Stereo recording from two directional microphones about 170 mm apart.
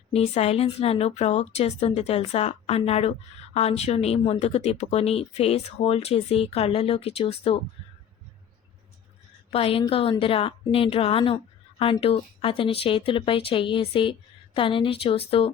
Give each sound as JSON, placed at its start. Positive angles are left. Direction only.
{"t": 0.1, "sound": "a woman's voice", "side_deg": 35}
{"t": 9.5, "sound": "a woman's voice", "side_deg": 35}